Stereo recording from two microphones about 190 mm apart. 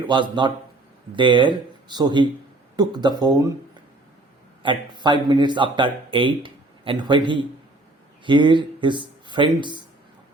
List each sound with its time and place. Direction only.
0.1 s speech: 25° right (ahead or behind)
4.6 s speech: 25° right (ahead or behind)